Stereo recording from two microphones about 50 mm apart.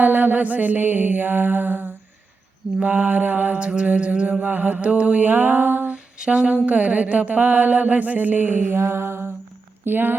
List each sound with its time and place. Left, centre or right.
0.0 s mantra: right
4.4 s mantra: right
5.9 s humming: centre
6.7 s mantra: right
8.7 s mantra: right
9.8 s mantra: right